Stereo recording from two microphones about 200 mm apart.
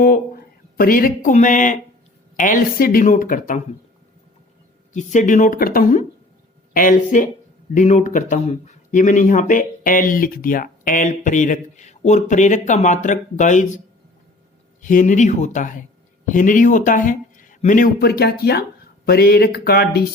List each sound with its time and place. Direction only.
0.8 s speech: 45° left (ahead or behind)
4.9 s speech: 40° left (ahead or behind)
18.0 s speech: 50° left (ahead or behind)